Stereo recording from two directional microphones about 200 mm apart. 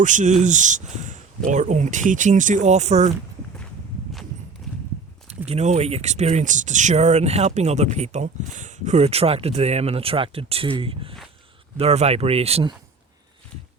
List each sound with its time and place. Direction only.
0.0 s speech: 40° right (ahead or behind)
4.6 s clip-clop: centre (ahead or behind)
5.5 s speech: 35° right (ahead or behind)